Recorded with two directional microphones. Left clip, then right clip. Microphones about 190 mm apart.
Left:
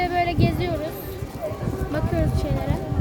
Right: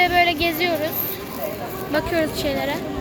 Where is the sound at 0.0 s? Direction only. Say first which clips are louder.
Right 5 dB; 10° left (ahead or behind).